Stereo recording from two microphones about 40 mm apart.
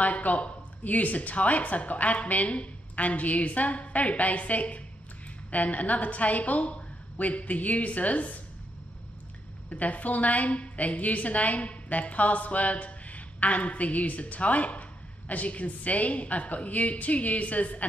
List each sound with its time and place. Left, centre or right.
0.0 s a woman's voice: left
9.7 s a woman's voice: left